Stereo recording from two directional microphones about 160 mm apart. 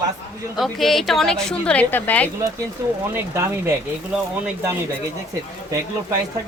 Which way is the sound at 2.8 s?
15° right (ahead or behind).